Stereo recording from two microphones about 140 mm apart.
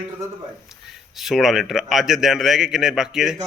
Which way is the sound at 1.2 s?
Centre (ahead or behind).